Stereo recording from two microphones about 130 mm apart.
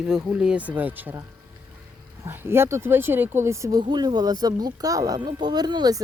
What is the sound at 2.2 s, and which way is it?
Speech, 20° right (ahead or behind).